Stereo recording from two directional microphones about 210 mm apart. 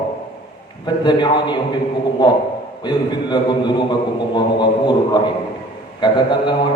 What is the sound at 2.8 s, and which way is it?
A man's voice, 20° left (ahead or behind).